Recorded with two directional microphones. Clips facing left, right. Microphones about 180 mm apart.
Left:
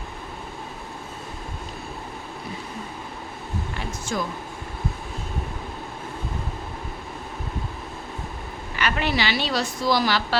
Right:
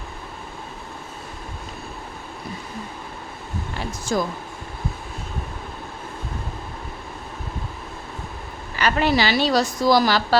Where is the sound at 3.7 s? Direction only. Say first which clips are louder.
Right 6 dB; 40° right (ahead or behind).